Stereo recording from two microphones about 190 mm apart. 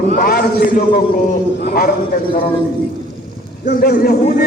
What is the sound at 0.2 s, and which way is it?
Speech, 50° left (ahead or behind).